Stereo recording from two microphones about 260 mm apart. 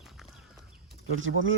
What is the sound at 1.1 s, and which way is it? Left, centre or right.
Speech, right.